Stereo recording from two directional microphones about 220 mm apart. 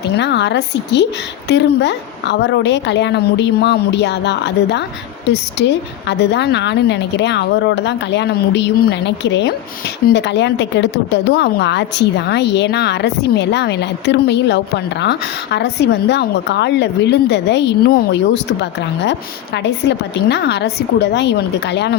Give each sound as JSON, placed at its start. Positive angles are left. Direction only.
{"t": 0.2, "sound": "a woman's voice", "side_deg": 50}
{"t": 19.6, "sound": "a woman's voice", "side_deg": 50}